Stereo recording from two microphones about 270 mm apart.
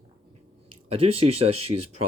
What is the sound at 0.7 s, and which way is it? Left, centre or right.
Speech, right.